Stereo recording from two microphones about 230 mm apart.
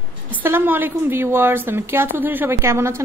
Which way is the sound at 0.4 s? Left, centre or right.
Centre.